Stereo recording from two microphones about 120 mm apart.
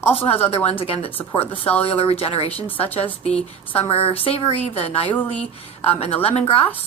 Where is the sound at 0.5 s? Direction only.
55° left (ahead or behind).